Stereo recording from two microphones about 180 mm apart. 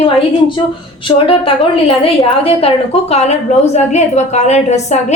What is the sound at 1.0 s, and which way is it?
A woman's voice, 30° left (ahead or behind).